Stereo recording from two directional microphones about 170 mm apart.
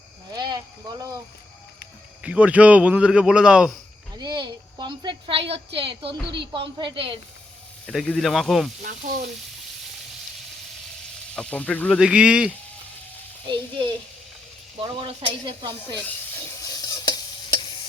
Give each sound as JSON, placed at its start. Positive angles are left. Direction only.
{"t": 0.3, "sound": "a sound", "side_deg": -25}
{"t": 2.2, "sound": "a man's voice", "side_deg": -5}
{"t": 4.1, "sound": "a sound", "side_deg": -25}
{"t": 5.7, "sound": "speech", "side_deg": -30}
{"t": 7.9, "sound": "speech", "side_deg": 0}
{"t": 8.8, "sound": "speech", "side_deg": -50}
{"t": 11.3, "sound": "speech", "side_deg": 5}
{"t": 11.9, "sound": "speech", "side_deg": -5}
{"t": 13.5, "sound": "speech", "side_deg": -30}
{"t": 16.0, "sound": "stir", "side_deg": 10}